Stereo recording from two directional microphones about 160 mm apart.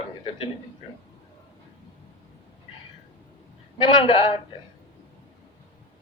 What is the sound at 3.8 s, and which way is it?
Speech, 30° left (ahead or behind).